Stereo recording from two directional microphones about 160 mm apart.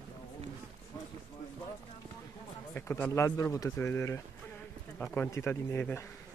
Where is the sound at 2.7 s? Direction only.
15° left (ahead or behind).